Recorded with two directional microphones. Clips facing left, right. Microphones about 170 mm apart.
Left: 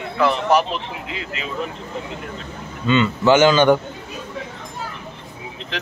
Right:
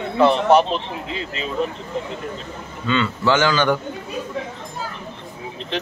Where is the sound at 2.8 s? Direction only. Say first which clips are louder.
Left 4 dB; 20° left (ahead or behind).